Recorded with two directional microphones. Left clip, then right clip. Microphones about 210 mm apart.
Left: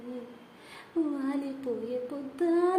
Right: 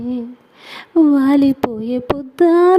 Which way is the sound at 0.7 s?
45° right (ahead or behind).